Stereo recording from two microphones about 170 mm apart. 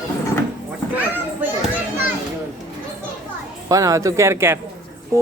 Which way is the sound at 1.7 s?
10° right (ahead or behind).